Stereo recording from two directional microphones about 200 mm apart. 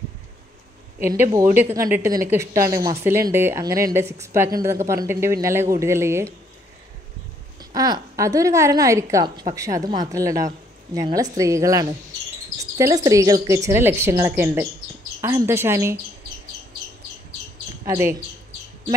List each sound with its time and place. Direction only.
1.5 s a woman's voice: 15° right (ahead or behind)
7.7 s a woman's voice: 15° right (ahead or behind)
17.8 s a woman's voice: 15° right (ahead or behind)